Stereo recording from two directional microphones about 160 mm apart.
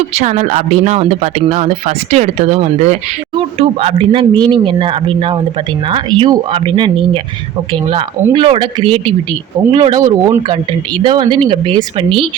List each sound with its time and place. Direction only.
0.1 s speech: 45° right (ahead or behind)